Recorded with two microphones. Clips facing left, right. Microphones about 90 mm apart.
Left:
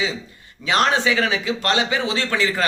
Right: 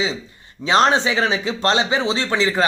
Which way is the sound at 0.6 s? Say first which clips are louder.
Right 3 dB; 25° right (ahead or behind).